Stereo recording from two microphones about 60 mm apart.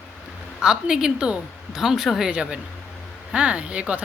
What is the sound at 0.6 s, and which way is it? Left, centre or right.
A woman's voice, centre.